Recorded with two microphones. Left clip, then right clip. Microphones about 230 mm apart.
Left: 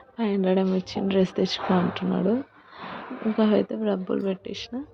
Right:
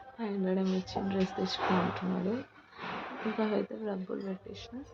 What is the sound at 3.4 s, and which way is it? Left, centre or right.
Speech, left.